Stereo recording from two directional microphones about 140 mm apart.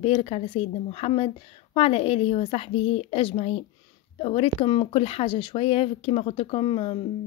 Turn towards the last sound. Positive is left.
turn(degrees=35)  # may be behind; listen again after turning